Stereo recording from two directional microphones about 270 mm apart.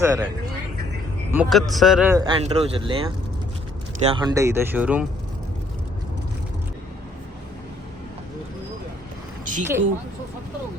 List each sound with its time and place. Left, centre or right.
0.0 s a man's voice: centre
1.3 s a man's voice: centre
9.4 s a sound: right